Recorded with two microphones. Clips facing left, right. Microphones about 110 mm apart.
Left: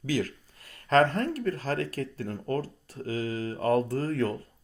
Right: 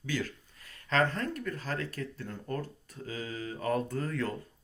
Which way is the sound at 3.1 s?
45° left (ahead or behind).